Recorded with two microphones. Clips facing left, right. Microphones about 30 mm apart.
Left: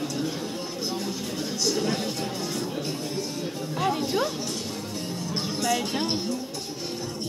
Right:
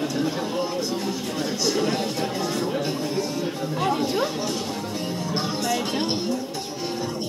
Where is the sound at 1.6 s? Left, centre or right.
Centre.